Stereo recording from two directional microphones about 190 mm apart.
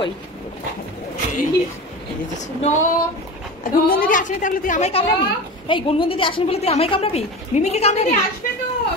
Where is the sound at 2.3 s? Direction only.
40° left (ahead or behind).